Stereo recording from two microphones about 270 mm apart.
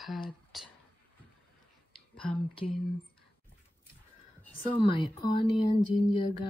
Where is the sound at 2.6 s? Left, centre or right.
Left.